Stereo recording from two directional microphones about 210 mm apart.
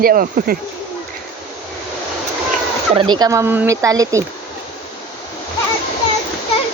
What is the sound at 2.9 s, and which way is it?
Speech, 20° right (ahead or behind).